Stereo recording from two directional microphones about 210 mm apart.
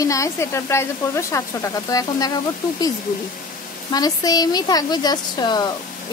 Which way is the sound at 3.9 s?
20° left (ahead or behind).